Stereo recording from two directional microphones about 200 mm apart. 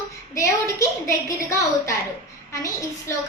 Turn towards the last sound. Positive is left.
turn(degrees=15)  # may be behind; listen again after turning